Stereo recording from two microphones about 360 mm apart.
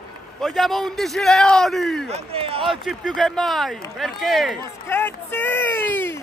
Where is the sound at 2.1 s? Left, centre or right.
Centre.